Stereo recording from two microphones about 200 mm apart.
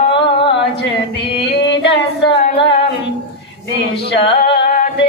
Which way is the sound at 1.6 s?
60° left (ahead or behind).